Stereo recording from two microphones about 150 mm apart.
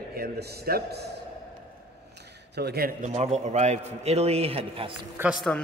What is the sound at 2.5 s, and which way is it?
Speech, 90° right.